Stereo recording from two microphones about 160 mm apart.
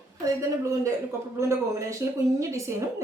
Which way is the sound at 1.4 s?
20° right (ahead or behind).